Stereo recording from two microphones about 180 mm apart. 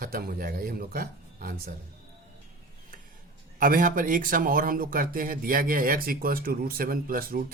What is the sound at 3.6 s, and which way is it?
Speech, 50° right (ahead or behind).